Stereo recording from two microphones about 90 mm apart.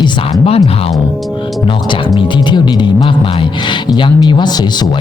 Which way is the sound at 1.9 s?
65° left (ahead or behind).